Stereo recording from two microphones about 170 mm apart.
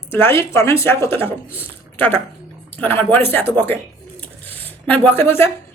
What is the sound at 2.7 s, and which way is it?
Speech, 10° left (ahead or behind).